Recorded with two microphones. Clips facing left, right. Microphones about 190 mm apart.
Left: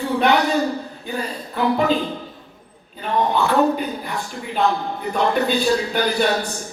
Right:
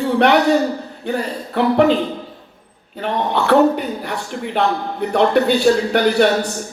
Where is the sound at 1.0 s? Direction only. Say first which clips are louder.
Right 8 dB; 70° right (ahead or behind).